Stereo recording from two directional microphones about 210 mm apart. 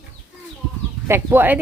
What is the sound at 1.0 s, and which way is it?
Speech, 10° right (ahead or behind).